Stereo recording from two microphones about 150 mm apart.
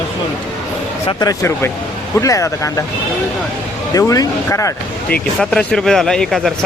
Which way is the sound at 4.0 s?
20° left (ahead or behind).